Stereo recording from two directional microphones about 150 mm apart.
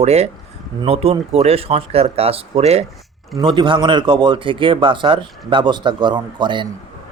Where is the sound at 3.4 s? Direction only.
30° right (ahead or behind).